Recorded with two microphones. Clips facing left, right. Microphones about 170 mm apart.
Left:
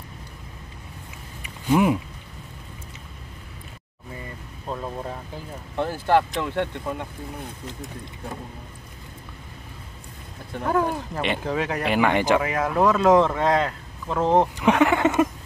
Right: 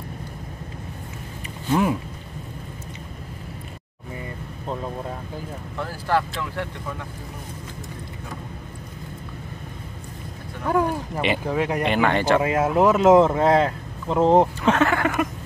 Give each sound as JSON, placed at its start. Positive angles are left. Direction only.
{"t": 1.4, "sound": "a sound", "side_deg": 15}
{"t": 5.8, "sound": "speech", "side_deg": 20}
{"t": 10.7, "sound": "speech", "side_deg": -5}
{"t": 11.8, "sound": "speech", "side_deg": 10}
{"t": 12.4, "sound": "speech", "side_deg": -25}
{"t": 14.6, "sound": "speech", "side_deg": 15}